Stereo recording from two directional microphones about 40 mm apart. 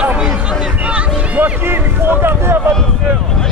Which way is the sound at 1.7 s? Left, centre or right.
Right.